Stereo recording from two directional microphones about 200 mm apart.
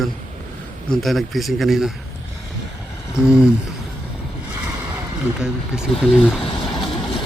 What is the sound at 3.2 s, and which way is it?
Speech, 5° right (ahead or behind).